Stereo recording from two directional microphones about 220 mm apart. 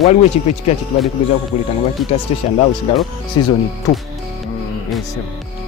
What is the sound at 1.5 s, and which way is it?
Speech, 30° left (ahead or behind).